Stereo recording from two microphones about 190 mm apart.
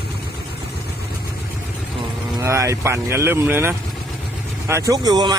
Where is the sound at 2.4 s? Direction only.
15° right (ahead or behind).